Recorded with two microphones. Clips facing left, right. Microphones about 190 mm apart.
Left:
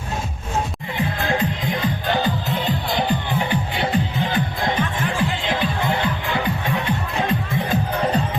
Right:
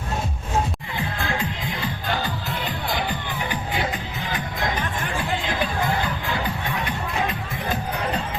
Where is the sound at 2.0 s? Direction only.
20° left (ahead or behind).